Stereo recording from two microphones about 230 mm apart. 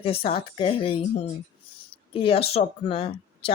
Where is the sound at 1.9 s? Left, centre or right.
Left.